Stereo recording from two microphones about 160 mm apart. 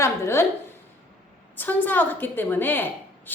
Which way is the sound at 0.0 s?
15° left (ahead or behind).